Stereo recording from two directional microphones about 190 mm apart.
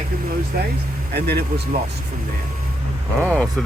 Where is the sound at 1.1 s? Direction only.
60° right (ahead or behind).